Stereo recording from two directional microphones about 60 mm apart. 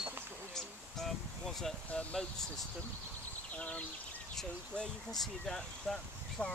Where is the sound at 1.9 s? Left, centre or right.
Left.